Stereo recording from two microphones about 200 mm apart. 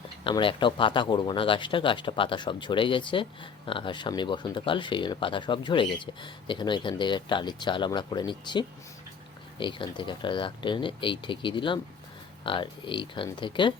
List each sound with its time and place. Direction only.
0.3 s speech: 25° left (ahead or behind)